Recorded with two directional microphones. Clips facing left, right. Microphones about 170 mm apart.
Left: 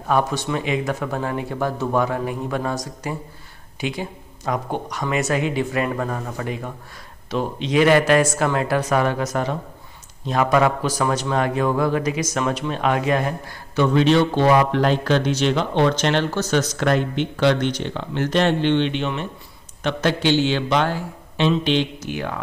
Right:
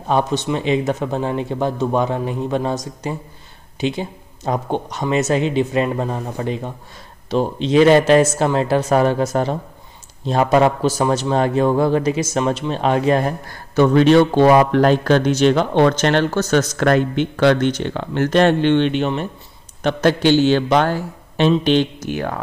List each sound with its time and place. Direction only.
0.0 s a man's voice: 20° right (ahead or behind)
13.5 s a man's voice: 50° right (ahead or behind)